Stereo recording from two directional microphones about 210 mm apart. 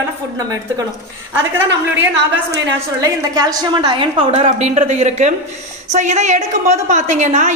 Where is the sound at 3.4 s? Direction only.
20° right (ahead or behind).